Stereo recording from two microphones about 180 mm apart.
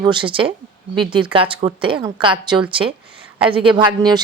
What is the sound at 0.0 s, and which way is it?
Speech, 25° right (ahead or behind).